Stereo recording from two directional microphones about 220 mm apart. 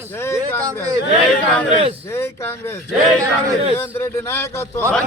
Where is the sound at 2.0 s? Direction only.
10° left (ahead or behind).